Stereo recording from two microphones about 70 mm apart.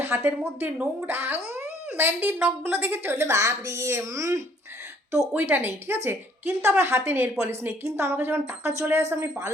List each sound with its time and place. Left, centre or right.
0.0 s a woman's voice: right
1.5 s speech: right
3.3 s speech: right
5.3 s a woman's voice: right